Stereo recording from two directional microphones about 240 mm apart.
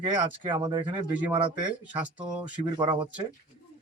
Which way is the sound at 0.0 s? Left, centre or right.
Centre.